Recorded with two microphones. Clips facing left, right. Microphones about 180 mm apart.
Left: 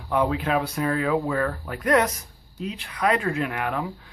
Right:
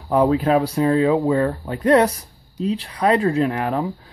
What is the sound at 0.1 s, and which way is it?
Speech, 35° right (ahead or behind).